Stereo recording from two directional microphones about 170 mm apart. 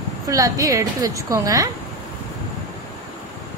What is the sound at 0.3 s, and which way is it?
A woman's voice, 20° right (ahead or behind).